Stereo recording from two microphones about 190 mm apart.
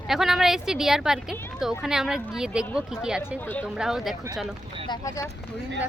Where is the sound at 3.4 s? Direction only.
10° left (ahead or behind).